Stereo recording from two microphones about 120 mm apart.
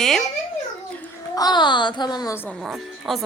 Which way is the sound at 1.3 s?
35° left (ahead or behind).